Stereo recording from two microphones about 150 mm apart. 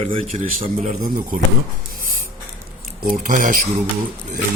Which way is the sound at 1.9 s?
70° right (ahead or behind).